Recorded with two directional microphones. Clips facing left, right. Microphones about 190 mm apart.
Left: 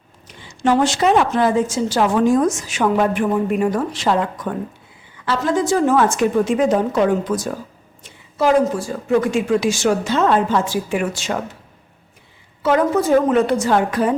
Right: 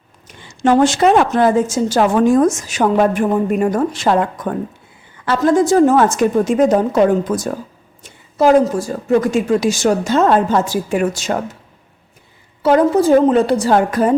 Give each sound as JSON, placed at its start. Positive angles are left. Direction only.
{"t": 0.6, "sound": "a woman's voice", "side_deg": -50}
{"t": 12.6, "sound": "a woman's voice", "side_deg": -35}